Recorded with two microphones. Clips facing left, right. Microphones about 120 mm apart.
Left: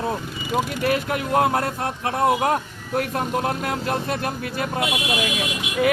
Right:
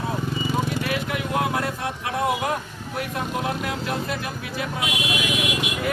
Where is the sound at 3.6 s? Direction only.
45° left (ahead or behind).